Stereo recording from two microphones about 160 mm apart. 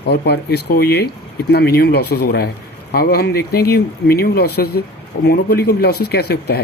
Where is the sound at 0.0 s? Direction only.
90° left.